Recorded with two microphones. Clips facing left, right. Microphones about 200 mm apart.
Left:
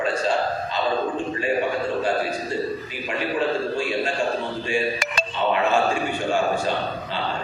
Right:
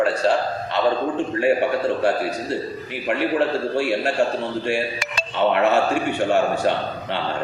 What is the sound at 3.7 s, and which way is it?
Speech, 70° right (ahead or behind).